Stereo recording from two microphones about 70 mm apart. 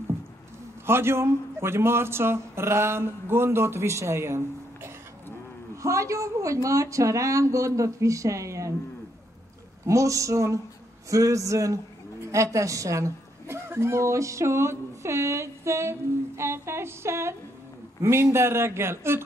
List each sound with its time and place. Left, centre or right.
0.8 s a woman's voice: right
9.8 s a woman's voice: right